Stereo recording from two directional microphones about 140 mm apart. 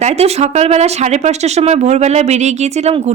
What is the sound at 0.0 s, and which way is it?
Speech, 50° right (ahead or behind).